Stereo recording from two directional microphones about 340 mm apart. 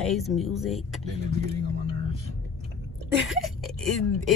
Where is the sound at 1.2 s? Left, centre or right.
Right.